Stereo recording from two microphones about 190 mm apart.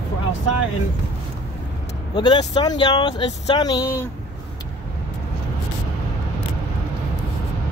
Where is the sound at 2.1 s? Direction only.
20° left (ahead or behind).